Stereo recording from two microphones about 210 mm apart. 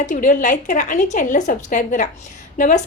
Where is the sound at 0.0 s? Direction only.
35° left (ahead or behind).